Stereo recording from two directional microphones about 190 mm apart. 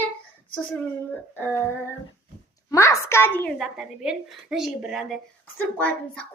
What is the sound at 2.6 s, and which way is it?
Speech, 15° left (ahead or behind).